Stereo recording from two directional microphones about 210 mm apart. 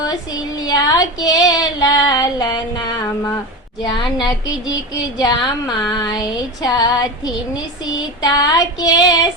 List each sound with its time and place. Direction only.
0.6 s speech: 20° left (ahead or behind)
3.8 s speech: 20° left (ahead or behind)
8.2 s speech: 20° left (ahead or behind)